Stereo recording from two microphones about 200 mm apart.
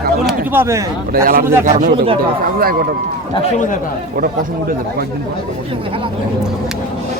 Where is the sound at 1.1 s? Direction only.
45° right (ahead or behind).